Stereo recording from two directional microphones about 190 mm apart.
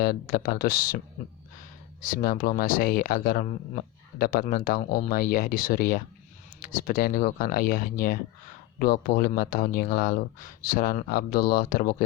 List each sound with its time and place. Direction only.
0.0 s speech: 50° left (ahead or behind)